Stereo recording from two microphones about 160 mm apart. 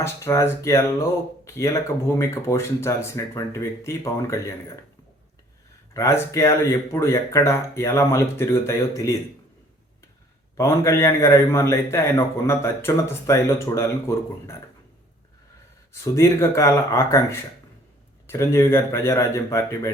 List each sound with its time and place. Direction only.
0.0 s speech: 15° left (ahead or behind)
5.9 s speech: 20° left (ahead or behind)
10.6 s speech: 15° left (ahead or behind)
16.1 s speech: 15° left (ahead or behind)
18.3 s speech: 15° left (ahead or behind)